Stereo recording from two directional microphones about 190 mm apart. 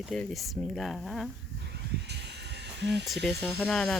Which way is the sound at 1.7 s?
60° right (ahead or behind).